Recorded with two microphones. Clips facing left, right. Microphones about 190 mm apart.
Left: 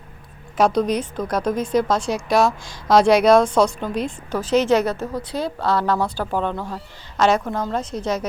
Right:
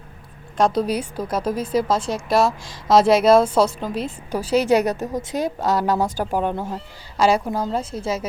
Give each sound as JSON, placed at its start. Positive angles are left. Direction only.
{"t": 0.5, "sound": "a woman's voice", "side_deg": 0}